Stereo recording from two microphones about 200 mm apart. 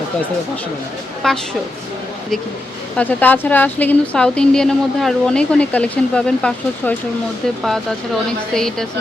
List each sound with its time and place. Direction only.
1.2 s a woman's voice: centre (ahead or behind)
3.0 s a woman's voice: 10° left (ahead or behind)